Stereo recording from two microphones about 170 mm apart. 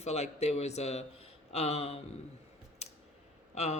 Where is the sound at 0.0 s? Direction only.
40° left (ahead or behind).